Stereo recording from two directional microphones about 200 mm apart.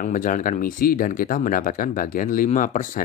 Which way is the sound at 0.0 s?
40° left (ahead or behind).